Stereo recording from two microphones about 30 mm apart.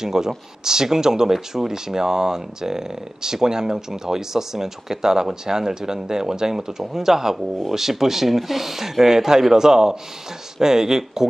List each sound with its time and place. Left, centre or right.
0.0 s speech: centre